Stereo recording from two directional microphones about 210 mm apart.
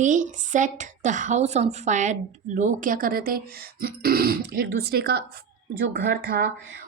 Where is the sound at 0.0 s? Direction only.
35° right (ahead or behind).